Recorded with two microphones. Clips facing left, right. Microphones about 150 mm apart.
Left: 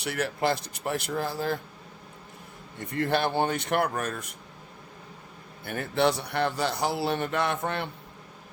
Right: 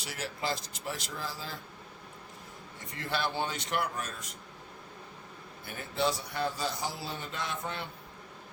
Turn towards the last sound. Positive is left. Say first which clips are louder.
# left 9 dB
turn(degrees=60)  # may be behind; listen again after turning